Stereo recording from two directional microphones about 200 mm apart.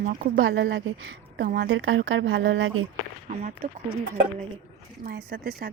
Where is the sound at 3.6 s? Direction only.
40° right (ahead or behind).